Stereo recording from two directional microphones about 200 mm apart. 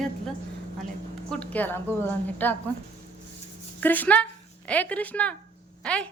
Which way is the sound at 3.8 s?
10° left (ahead or behind).